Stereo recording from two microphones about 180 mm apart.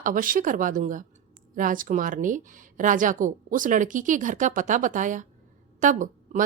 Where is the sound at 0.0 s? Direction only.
50° right (ahead or behind).